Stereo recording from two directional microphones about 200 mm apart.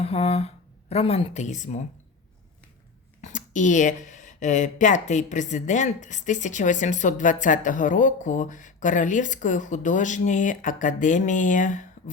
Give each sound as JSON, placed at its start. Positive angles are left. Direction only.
{"t": 0.0, "sound": "speech", "side_deg": 30}
{"t": 3.2, "sound": "speech", "side_deg": 40}